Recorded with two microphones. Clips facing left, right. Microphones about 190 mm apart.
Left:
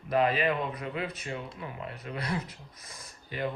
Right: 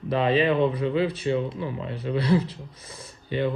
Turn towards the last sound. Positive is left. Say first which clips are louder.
# right 8 dB
turn(degrees=-30)  # may be behind; listen again after turning